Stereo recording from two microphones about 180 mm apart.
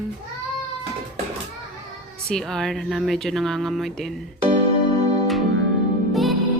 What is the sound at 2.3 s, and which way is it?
Speech, 5° left (ahead or behind).